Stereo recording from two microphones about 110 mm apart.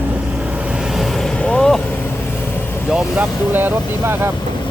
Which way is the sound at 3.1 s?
20° right (ahead or behind).